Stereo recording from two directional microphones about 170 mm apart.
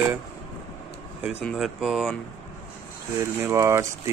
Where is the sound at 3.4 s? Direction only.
15° right (ahead or behind).